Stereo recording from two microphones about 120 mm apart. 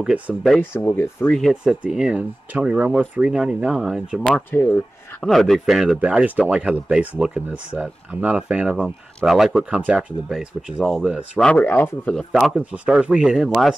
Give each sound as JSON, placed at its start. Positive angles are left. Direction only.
{"t": 0.0, "sound": "speech", "side_deg": -10}
{"t": 0.6, "sound": "speech", "side_deg": 20}
{"t": 1.5, "sound": "speech", "side_deg": -5}
{"t": 4.5, "sound": "speech", "side_deg": 20}
{"t": 5.2, "sound": "speech", "side_deg": 0}
{"t": 9.8, "sound": "speech", "side_deg": -10}
{"t": 11.3, "sound": "speech", "side_deg": 15}
{"t": 12.3, "sound": "speech", "side_deg": 0}